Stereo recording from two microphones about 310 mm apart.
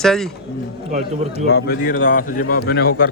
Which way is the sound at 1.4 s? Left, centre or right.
Left.